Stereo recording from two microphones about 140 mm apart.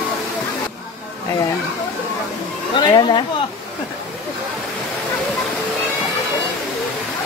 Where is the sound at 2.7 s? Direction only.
35° left (ahead or behind).